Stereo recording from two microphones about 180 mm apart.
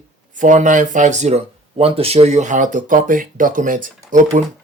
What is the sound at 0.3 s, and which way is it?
Speech, 45° right (ahead or behind).